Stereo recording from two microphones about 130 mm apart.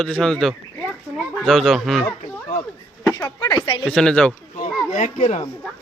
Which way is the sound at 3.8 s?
5° left (ahead or behind).